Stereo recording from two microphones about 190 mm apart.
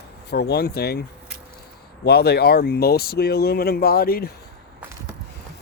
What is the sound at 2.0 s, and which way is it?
Speech, 60° left (ahead or behind).